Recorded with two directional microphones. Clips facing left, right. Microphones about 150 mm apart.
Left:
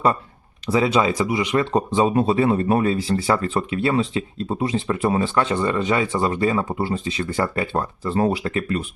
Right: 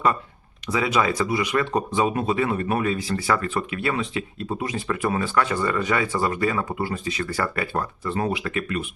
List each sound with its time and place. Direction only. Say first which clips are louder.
0.7 s speech: left 4 dB; 30° left (ahead or behind)